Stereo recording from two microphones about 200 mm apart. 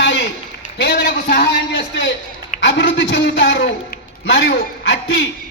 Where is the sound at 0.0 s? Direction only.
65° left (ahead or behind).